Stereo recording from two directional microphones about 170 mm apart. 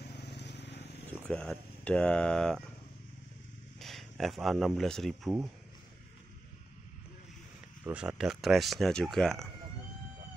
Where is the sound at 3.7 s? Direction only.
Centre (ahead or behind).